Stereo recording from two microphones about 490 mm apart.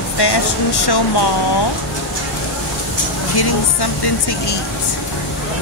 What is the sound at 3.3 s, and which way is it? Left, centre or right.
Speech, left.